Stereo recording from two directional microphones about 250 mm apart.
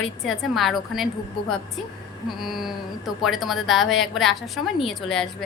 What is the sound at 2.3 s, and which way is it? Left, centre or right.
A woman's voice, centre.